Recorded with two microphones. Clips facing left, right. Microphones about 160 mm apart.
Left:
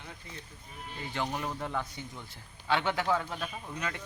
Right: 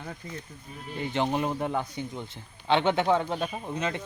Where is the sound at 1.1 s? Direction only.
20° right (ahead or behind).